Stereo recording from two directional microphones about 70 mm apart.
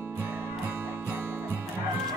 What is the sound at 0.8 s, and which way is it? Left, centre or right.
Music, right.